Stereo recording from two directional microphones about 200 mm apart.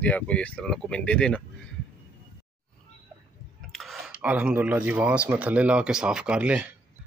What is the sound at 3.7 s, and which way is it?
Speech, centre (ahead or behind).